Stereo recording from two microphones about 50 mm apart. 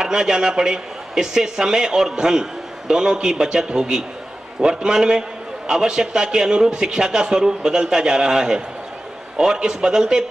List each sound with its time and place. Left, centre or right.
0.0 s a man's voice: centre